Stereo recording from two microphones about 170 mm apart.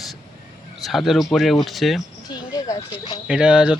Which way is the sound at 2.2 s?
25° left (ahead or behind).